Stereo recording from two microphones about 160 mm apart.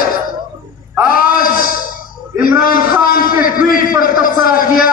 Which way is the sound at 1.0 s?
65° left (ahead or behind).